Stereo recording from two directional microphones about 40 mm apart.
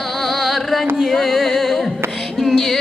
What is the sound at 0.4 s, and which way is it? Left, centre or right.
Carnatic music, centre.